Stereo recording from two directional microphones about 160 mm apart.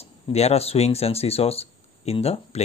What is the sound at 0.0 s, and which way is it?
Speech, 40° left (ahead or behind).